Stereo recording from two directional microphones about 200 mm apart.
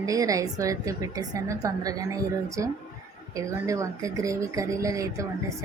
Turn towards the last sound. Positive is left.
turn(degrees=-15)  # may be behind; listen again after turning